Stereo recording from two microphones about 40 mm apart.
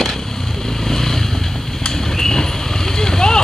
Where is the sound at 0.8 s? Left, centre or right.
Centre.